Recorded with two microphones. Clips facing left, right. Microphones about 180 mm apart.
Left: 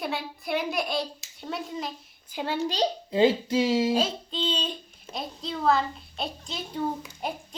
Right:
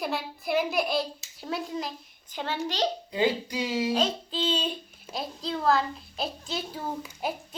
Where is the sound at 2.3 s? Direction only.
10° left (ahead or behind).